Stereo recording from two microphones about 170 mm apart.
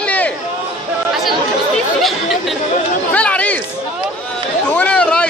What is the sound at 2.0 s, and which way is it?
Speech, centre (ahead or behind).